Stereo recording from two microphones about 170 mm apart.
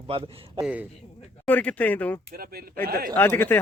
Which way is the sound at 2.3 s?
65° right (ahead or behind).